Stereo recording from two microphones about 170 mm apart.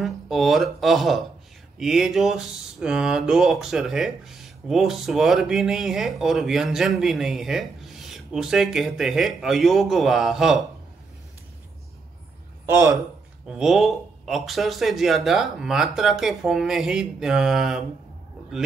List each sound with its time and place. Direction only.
0.0 s speech: centre (ahead or behind)
12.6 s speech: 15° right (ahead or behind)
13.5 s speech: centre (ahead or behind)